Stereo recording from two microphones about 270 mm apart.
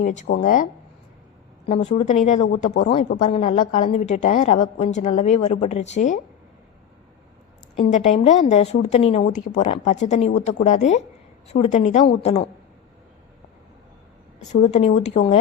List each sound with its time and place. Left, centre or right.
0.0 s a woman's voice: left
7.8 s a woman's voice: left
14.5 s a woman's voice: left